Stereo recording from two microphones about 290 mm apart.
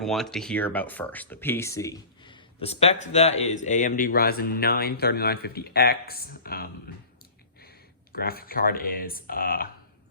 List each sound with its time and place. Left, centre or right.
0.0 s speech: centre; by 6.7 s left
8.1 s speech: left